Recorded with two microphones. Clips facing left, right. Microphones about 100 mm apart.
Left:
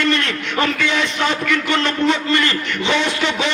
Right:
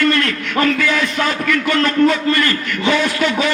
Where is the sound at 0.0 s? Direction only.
20° left (ahead or behind).